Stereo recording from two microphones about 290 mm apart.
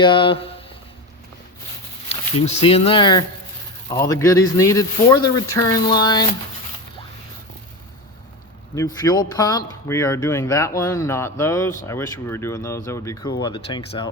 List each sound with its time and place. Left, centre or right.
0.0 s speech: centre
2.0 s speech: left
9.0 s speech: centre